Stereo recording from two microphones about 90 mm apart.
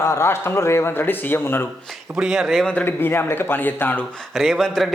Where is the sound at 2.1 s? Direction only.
5° right (ahead or behind).